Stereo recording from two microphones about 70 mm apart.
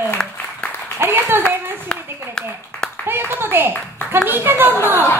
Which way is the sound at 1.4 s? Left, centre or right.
Centre.